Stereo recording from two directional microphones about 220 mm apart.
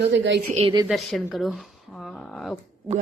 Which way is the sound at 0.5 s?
20° right (ahead or behind).